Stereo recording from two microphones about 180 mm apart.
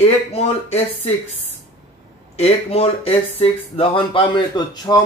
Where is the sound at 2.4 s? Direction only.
35° left (ahead or behind).